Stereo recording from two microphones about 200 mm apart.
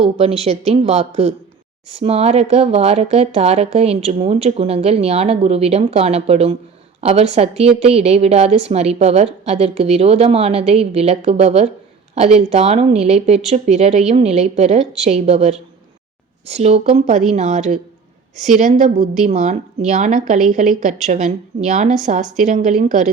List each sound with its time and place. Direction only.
0.0 s speech: 30° right (ahead or behind)